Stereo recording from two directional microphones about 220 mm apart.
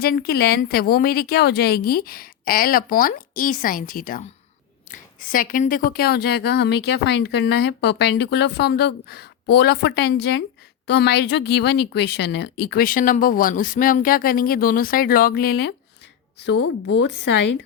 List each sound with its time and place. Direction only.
0.0 s a woman's voice: 45° left (ahead or behind)